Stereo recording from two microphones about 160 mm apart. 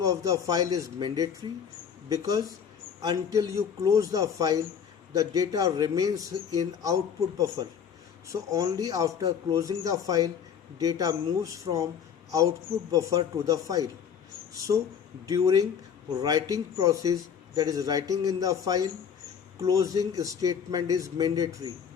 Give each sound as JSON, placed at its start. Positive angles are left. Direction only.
{"t": 0.0, "sound": "a man's voice", "side_deg": -20}
{"t": 12.9, "sound": "a man's voice", "side_deg": -20}
{"t": 15.3, "sound": "a man's voice", "side_deg": -20}